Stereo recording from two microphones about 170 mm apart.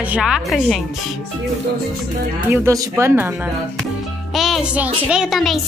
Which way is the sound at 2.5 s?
15° right (ahead or behind).